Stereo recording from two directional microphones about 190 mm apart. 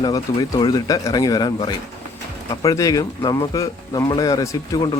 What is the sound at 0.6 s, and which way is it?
A man's voice, 20° left (ahead or behind).